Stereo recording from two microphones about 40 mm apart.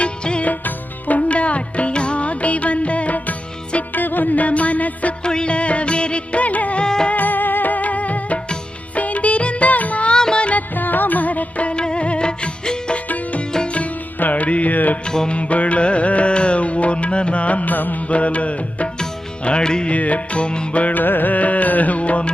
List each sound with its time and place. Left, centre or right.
0.0 s music: left
0.6 s music: left
3.9 s music: left
5.2 s music of bollywood: left
6.8 s music: centre
7.1 s music: left
10.1 s music: left
10.8 s music: left
14.2 s music: left
15.3 s music: left
19.5 s music: left
19.9 s music: left
21.0 s music: left